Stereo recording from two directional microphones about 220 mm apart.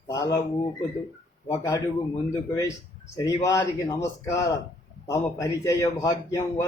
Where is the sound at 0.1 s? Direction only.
15° left (ahead or behind).